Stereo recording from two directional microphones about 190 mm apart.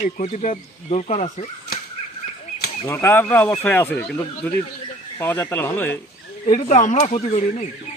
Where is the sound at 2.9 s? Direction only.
10° left (ahead or behind).